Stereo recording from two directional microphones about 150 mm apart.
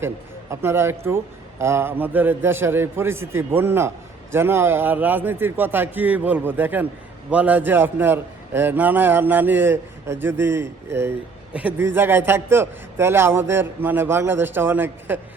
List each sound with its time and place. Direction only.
0.5 s a man's voice: 15° right (ahead or behind)